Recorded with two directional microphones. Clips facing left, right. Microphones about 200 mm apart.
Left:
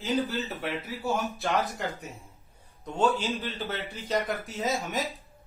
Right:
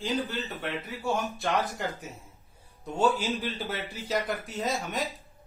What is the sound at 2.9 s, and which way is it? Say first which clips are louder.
A man's voice: even; 10° right (ahead or behind).